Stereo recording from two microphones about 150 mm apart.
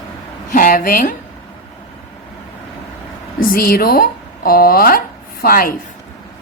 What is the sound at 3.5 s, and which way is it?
Speech, 75° left (ahead or behind).